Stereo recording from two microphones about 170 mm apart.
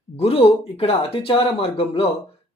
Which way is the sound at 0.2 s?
35° left (ahead or behind).